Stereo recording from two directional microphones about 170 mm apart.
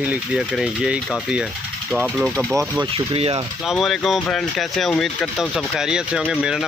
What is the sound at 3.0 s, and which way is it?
Speech, 35° right (ahead or behind).